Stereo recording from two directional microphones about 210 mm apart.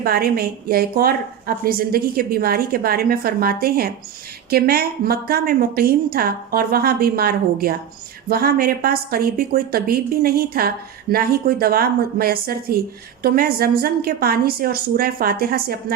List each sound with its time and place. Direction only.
0.0 s a woman's voice: 45° right (ahead or behind)